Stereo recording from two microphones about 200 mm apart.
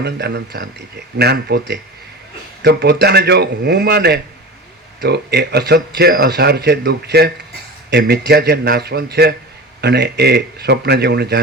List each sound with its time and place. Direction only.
0.0 s speech: 55° right (ahead or behind)